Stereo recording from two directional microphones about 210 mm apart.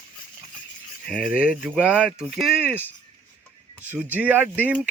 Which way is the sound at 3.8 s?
5° right (ahead or behind).